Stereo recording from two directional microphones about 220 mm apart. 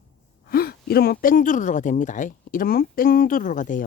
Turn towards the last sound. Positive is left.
turn(degrees=35)  # may be behind; listen again after turning